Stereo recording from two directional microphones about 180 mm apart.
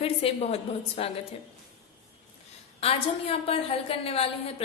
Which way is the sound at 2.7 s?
35° left (ahead or behind).